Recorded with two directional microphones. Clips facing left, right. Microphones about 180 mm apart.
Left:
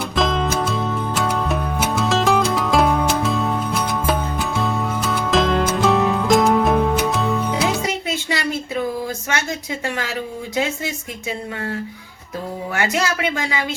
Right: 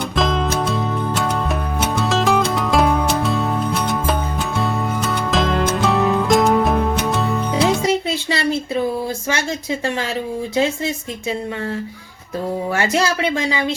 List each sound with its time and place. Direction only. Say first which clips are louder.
0.2 s music: even; centre (ahead or behind)
7.9 s a sound: right 4 dB; 30° right (ahead or behind)
10.5 s a woman's voice: right 3 dB; 30° right (ahead or behind)
12.7 s a woman's voice: right 1 dB; 30° right (ahead or behind)